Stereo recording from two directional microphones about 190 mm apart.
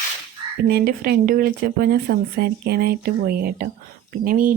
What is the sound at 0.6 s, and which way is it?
Speech, 55° right (ahead or behind).